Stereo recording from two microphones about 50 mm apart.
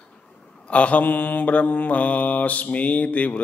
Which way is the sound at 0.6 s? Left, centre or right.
Left.